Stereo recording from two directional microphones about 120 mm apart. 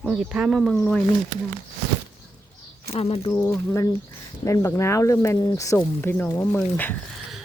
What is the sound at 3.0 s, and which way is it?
Speech, 55° left (ahead or behind).